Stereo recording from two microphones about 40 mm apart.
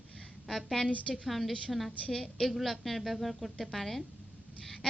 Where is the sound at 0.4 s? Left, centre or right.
Centre.